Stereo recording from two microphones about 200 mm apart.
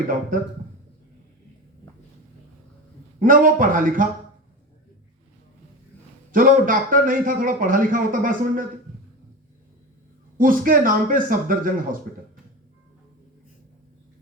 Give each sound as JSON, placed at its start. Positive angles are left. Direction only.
{"t": 3.2, "sound": "a man's voice", "side_deg": -45}
{"t": 6.3, "sound": "a man's voice", "side_deg": -45}
{"t": 10.3, "sound": "a man's voice", "side_deg": -45}